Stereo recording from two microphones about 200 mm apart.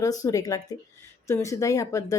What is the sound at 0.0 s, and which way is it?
A woman's voice, 20° left (ahead or behind).